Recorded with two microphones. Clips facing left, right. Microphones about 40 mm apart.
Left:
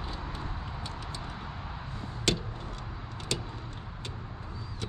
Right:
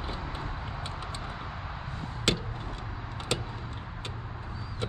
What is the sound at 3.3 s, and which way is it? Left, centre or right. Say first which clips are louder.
Vehicle: right 3 dB; right.